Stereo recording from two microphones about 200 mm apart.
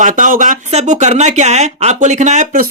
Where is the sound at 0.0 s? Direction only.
40° right (ahead or behind).